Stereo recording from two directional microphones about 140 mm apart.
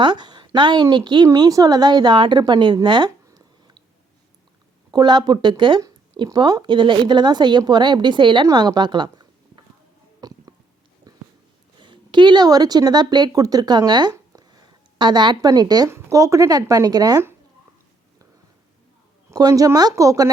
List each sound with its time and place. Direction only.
0.0 s a woman's voice: 30° right (ahead or behind)
4.9 s speech: 30° right (ahead or behind)
10.2 s a sound: 30° right (ahead or behind)
11.8 s speech: 35° right (ahead or behind)
19.3 s speech: 25° right (ahead or behind)